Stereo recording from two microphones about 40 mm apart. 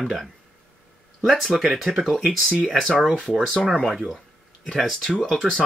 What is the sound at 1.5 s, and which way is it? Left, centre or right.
Speech, centre.